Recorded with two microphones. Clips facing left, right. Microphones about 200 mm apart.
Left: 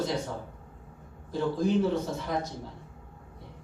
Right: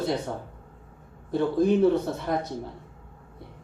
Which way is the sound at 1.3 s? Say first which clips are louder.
Right 5 dB; 60° right (ahead or behind).